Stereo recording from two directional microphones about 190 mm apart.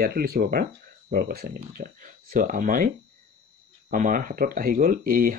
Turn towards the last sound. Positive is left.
turn(degrees=-50)  # may be behind; listen again after turning